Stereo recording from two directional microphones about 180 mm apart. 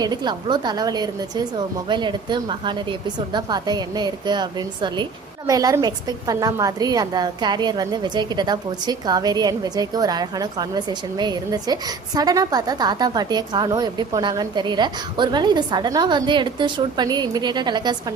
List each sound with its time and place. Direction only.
0.0 s a woman's voice: 25° right (ahead or behind)